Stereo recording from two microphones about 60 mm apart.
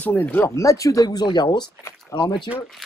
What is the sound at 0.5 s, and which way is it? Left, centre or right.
Speech, left.